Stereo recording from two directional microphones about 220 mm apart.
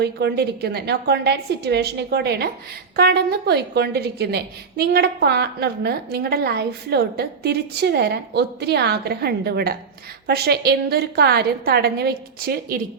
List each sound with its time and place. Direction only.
0.0 s a woman's voice: 50° right (ahead or behind)